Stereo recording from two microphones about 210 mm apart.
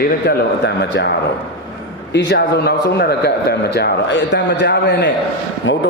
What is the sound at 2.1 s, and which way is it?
A man's voice, 50° left (ahead or behind).